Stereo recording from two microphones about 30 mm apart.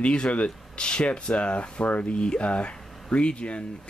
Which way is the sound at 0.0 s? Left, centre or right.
Left.